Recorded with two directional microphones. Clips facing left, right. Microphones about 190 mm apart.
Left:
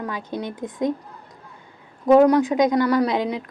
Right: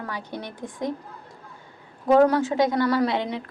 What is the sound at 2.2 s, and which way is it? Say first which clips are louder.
A woman's voice: left 4 dB; 15° left (ahead or behind).